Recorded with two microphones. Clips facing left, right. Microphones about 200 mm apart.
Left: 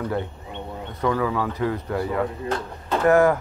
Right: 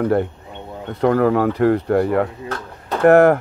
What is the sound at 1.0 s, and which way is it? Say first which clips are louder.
Speech: right 8 dB; 60° right (ahead or behind).